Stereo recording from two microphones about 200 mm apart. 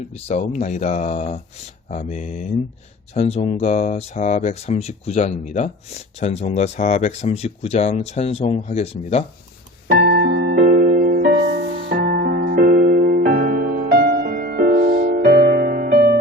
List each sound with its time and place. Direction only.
0.1 s speech: 35° left (ahead or behind)
9.9 s music: 55° right (ahead or behind)
10.5 s music: 40° right (ahead or behind)